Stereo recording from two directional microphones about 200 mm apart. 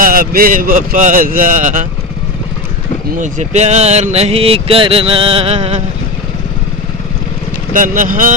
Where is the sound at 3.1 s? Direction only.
40° right (ahead or behind).